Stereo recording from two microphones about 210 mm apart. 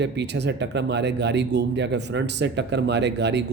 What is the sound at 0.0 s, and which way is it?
Speech, 55° right (ahead or behind).